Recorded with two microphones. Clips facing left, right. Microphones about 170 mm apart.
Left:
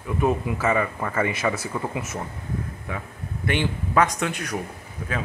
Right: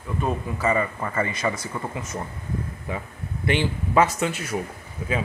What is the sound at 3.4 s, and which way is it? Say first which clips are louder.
Speech: right 1 dB; 55° left (ahead or behind).